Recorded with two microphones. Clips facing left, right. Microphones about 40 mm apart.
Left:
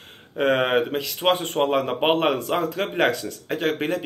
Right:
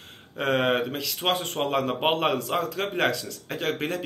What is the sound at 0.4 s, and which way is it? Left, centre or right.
Speech, left.